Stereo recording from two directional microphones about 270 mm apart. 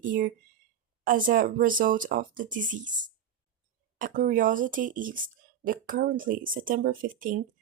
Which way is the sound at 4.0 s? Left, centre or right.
Right.